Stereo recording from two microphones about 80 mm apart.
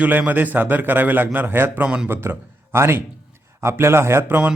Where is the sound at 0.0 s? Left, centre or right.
Right.